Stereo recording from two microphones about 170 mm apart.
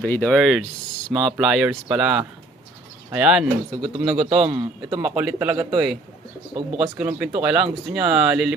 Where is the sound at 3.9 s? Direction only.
35° right (ahead or behind).